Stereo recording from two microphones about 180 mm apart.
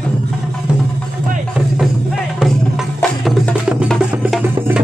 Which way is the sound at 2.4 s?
Centre (ahead or behind).